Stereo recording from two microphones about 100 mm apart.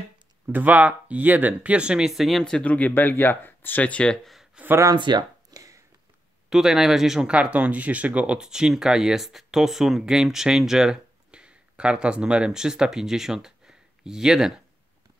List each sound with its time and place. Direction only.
0.5 s speech: 15° right (ahead or behind); by 4.5 s centre (ahead or behind)
4.9 s speech: 50° right (ahead or behind)
5.5 s a sound: 35° right (ahead or behind)
6.5 s speech: 5° right (ahead or behind)